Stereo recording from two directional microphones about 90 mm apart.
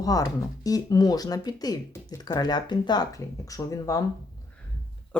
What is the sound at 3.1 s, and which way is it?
Speech, 40° left (ahead or behind).